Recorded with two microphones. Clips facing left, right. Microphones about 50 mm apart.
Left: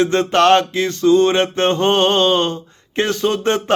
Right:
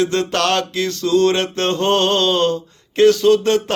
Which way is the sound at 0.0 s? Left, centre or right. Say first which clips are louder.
Left 4 dB; left.